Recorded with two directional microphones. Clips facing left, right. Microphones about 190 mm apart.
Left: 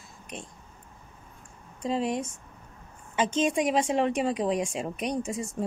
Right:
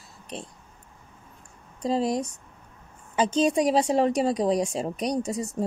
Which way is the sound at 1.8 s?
35° right (ahead or behind).